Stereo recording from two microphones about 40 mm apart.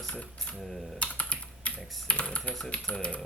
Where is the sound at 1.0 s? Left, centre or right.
Left.